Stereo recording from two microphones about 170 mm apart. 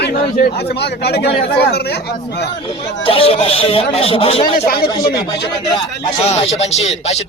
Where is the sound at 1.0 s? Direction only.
70° left (ahead or behind).